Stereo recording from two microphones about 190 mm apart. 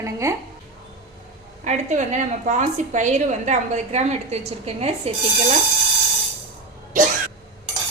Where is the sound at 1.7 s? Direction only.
40° right (ahead or behind).